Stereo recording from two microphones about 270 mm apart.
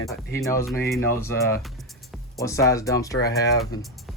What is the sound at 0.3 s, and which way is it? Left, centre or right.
Speech, centre.